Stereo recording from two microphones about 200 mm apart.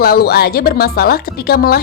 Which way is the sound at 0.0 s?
50° left (ahead or behind).